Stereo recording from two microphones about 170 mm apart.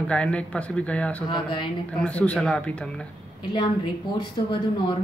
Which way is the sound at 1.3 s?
30° left (ahead or behind).